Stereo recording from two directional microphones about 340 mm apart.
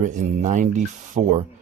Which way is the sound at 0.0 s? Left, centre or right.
Right.